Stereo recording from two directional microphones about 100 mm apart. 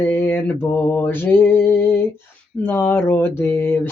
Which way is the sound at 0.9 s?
20° left (ahead or behind).